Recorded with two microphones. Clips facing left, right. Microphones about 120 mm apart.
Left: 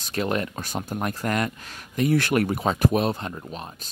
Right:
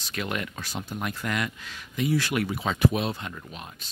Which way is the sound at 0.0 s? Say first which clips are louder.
Left 6 dB; 35° left (ahead or behind).